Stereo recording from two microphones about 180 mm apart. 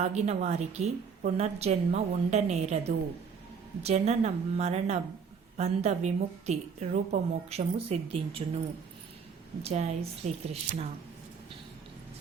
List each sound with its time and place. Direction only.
0.0 s a woman's voice: 40° right (ahead or behind)
9.6 s a woman's voice: 35° right (ahead or behind)